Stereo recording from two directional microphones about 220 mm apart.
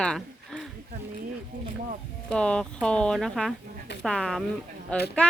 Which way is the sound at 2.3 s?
5° left (ahead or behind).